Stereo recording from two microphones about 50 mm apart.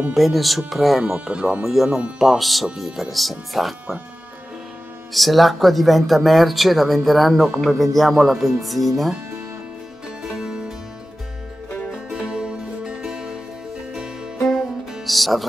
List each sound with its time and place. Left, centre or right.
0.1 s speech: centre
1.3 s speech: right
1.6 s speech: centre
1.9 s speech: centre
2.1 s speech: centre
5.1 s speech: centre
10.0 s music: centre
11.9 s music: centre
14.4 s music: centre